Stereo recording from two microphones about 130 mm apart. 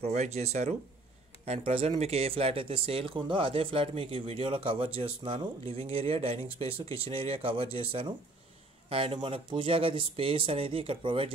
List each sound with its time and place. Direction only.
0.0 s speech: 55° right (ahead or behind)